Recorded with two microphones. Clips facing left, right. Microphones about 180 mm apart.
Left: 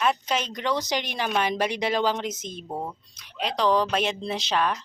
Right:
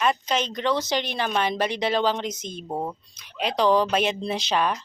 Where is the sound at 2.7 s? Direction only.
20° right (ahead or behind).